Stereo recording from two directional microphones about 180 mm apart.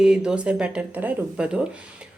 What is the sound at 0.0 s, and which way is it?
A woman's voice, 5° right (ahead or behind).